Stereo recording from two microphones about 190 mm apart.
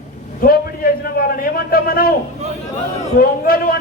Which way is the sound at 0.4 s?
50° left (ahead or behind).